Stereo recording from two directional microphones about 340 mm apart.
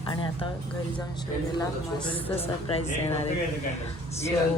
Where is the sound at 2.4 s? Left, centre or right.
Centre.